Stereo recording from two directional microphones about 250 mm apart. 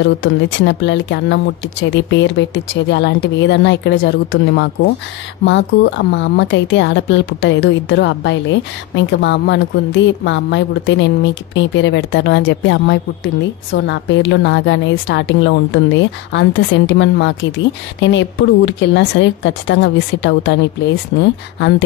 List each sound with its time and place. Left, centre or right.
0.0 s a woman's voice: left
18.7 s a woman's voice: left